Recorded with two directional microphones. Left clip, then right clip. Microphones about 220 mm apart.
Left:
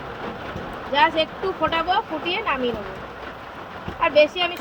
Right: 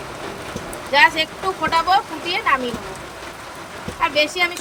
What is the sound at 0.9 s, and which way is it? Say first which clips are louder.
Speech: right 4 dB; 30° right (ahead or behind).